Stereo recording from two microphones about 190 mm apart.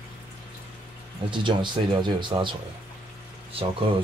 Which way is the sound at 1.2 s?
25° right (ahead or behind).